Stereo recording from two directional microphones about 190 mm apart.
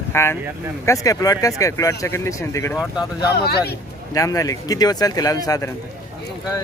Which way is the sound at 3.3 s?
55° left (ahead or behind).